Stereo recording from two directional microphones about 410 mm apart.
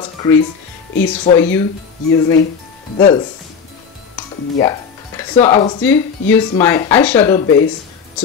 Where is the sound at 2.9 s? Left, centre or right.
Centre.